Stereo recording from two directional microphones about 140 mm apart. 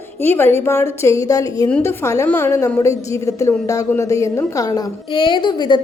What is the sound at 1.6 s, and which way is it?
A woman's voice, 15° left (ahead or behind).